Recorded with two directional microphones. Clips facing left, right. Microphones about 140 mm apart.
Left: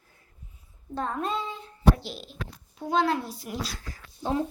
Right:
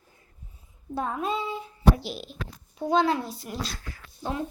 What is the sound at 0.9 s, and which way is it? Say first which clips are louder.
Speech: right 1 dB; 5° right (ahead or behind).